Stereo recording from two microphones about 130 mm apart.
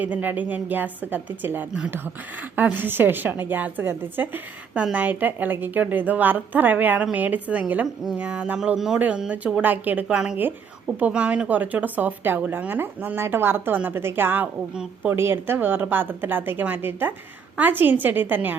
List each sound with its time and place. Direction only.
0.0 s a woman's voice: 15° right (ahead or behind)